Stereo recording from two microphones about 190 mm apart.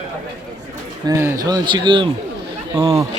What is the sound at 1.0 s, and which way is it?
Speech, 15° right (ahead or behind).